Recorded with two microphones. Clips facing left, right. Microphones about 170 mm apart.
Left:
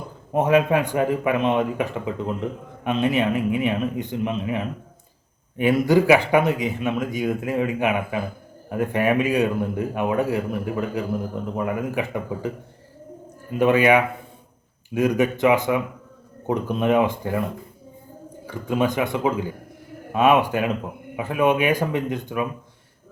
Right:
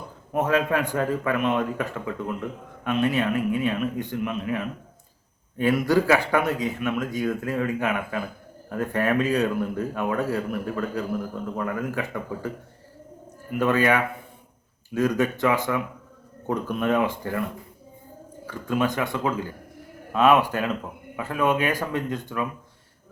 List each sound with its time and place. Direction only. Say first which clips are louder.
0.3 s speech: left 4 dB; 15° left (ahead or behind)
13.5 s speech: left 4 dB; 15° left (ahead or behind)
18.4 s speech: left 2 dB; 15° left (ahead or behind)